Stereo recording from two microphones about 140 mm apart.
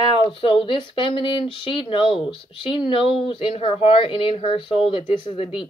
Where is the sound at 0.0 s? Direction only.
40° left (ahead or behind).